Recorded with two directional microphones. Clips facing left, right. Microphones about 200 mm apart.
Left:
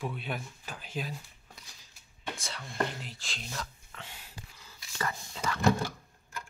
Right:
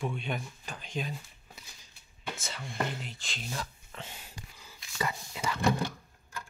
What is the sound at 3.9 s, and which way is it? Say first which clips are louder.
Whispering: right 3 dB; 20° right (ahead or behind).